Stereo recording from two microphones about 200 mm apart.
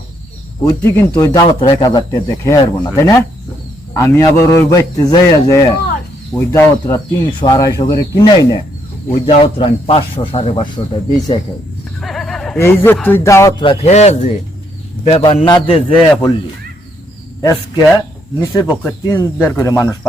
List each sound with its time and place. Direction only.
0.6 s speech: 10° left (ahead or behind)
11.9 s a sound: centre (ahead or behind)
12.5 s speech: 10° left (ahead or behind)
13.8 s speech: 35° left (ahead or behind)
17.4 s speech: 15° left (ahead or behind)